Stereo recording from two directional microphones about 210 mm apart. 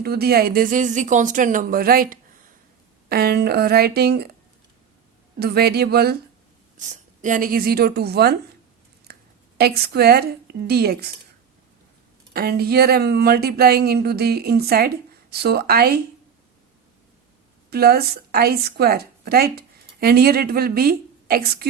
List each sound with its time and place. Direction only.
0.0 s speech: 50° right (ahead or behind)
5.4 s speech: 50° right (ahead or behind)
6.7 s speech: 35° right (ahead or behind)
9.1 s a sound: 50° right (ahead or behind)
9.6 s speech: 50° right (ahead or behind)
12.3 s speech: 50° right (ahead or behind)
17.7 s a woman's voice: 45° right (ahead or behind)